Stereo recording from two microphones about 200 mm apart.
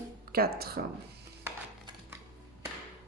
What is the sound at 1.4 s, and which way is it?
Dishes, 15° right (ahead or behind).